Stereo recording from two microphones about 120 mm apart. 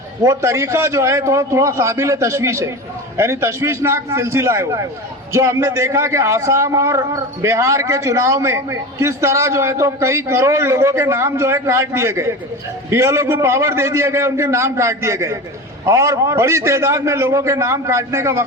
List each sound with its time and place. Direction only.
0.2 s a man's voice: 25° right (ahead or behind)